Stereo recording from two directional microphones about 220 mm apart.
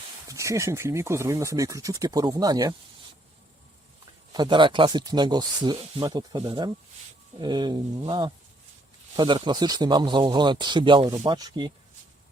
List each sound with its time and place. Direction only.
0.3 s speech: 15° right (ahead or behind)
4.3 s speech: 20° right (ahead or behind)